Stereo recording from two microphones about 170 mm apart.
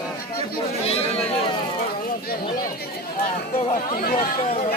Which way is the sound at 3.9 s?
50° left (ahead or behind).